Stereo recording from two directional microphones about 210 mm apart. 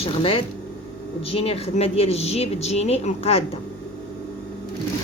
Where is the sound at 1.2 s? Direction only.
25° left (ahead or behind).